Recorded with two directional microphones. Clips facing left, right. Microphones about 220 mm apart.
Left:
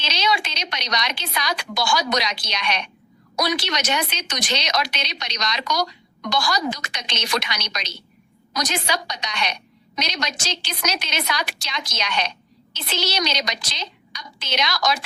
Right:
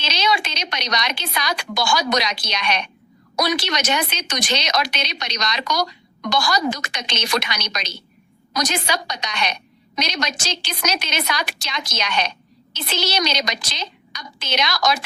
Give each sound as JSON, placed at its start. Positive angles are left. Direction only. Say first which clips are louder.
{"t": 0.0, "sound": "a woman's voice", "louder": "right 2 dB", "side_deg": -50}